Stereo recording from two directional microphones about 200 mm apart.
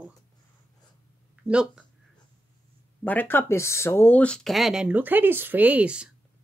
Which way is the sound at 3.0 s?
10° left (ahead or behind).